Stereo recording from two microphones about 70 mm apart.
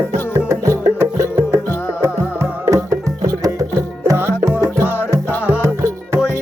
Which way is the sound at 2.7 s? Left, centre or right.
Right.